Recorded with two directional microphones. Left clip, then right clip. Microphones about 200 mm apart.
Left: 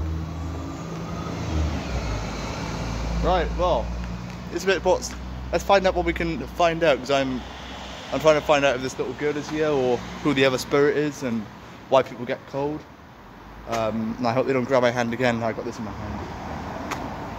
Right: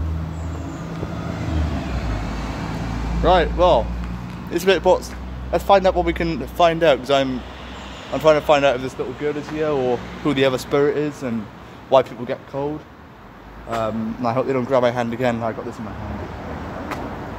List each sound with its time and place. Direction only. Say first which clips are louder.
3.3 s speech: right 7 dB; 55° right (ahead or behind)
4.6 s speech: right 6 dB; 25° right (ahead or behind)
5.5 s speech: right 4 dB; 10° right (ahead or behind)
13.7 s speech: right 2 dB; 5° left (ahead or behind)